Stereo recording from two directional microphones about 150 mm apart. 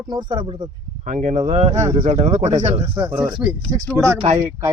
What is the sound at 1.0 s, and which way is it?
Speech, 50° right (ahead or behind).